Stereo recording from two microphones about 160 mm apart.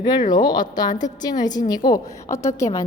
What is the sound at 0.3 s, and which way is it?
A woman's voice, 25° left (ahead or behind).